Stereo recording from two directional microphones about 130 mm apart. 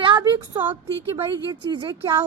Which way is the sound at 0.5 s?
15° right (ahead or behind).